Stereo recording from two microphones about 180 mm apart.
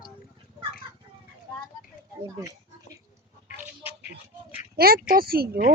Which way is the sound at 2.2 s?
15° right (ahead or behind).